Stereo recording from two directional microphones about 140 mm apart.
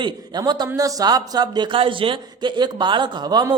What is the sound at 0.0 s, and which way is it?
A man's voice, 30° right (ahead or behind).